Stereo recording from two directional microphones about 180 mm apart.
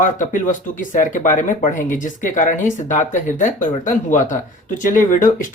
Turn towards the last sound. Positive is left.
turn(degrees=50)  # may be behind; listen again after turning